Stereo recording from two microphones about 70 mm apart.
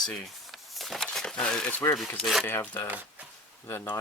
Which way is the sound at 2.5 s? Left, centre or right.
Left.